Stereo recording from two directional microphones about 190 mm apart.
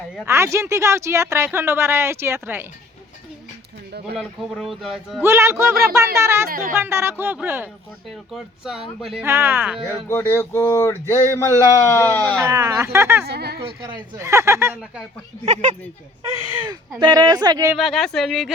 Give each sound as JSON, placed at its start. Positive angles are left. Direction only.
{"t": 0.3, "sound": "speech", "side_deg": -15}
{"t": 4.2, "sound": "a man's voice", "side_deg": 0}
{"t": 5.2, "sound": "speech", "side_deg": -15}
{"t": 6.5, "sound": "speech", "side_deg": -50}
{"t": 6.7, "sound": "a man's voice", "side_deg": -15}
{"t": 9.2, "sound": "speech", "side_deg": -15}
{"t": 9.8, "sound": "a sound", "side_deg": 15}
{"t": 12.4, "sound": "speech", "side_deg": -15}
{"t": 13.2, "sound": "speech", "side_deg": -60}
{"t": 13.6, "sound": "speech", "side_deg": -25}
{"t": 16.6, "sound": "speech", "side_deg": -25}
{"t": 17.7, "sound": "a man's voice", "side_deg": 0}